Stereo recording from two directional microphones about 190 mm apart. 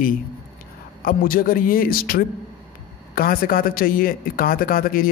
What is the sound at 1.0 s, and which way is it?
A man's voice, 50° left (ahead or behind).